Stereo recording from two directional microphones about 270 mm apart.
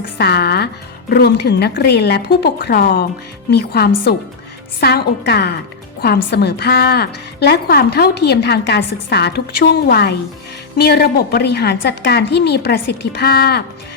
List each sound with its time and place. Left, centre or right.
0.2 s a woman's voice: left